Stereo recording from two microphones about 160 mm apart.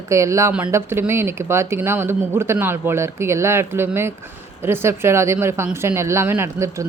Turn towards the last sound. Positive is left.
turn(degrees=-15)  # may be behind; listen again after turning